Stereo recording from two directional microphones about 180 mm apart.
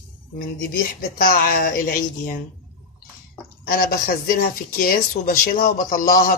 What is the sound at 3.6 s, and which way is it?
Speech, 55° left (ahead or behind).